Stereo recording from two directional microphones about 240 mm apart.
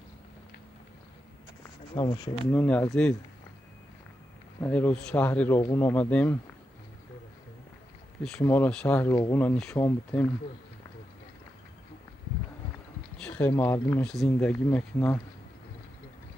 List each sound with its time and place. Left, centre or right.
2.0 s speech: centre
2.4 s speech: centre
4.6 s speech: centre
8.2 s speech: centre
13.1 s speech: centre